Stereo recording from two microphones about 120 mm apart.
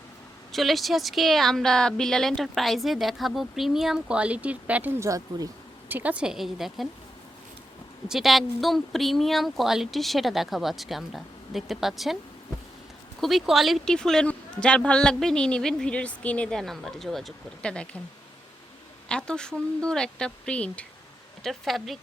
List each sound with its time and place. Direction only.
0.5 s a woman's voice: centre (ahead or behind)
4.9 s speech: 30° right (ahead or behind)
5.9 s a woman's voice: 10° right (ahead or behind)
8.0 s a woman's voice: 5° right (ahead or behind)
13.2 s a woman's voice: centre (ahead or behind)
19.0 s a woman's voice: 5° left (ahead or behind)